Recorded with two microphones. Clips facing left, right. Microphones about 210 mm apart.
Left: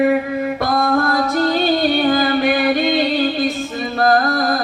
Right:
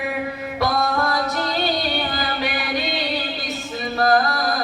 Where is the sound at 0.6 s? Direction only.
50° left (ahead or behind).